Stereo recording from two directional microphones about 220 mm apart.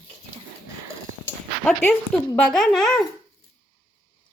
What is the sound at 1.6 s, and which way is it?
Speech, 5° left (ahead or behind).